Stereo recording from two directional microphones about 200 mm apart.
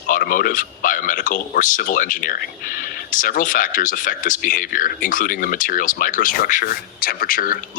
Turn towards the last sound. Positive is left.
turn(degrees=45)  # may be behind; listen again after turning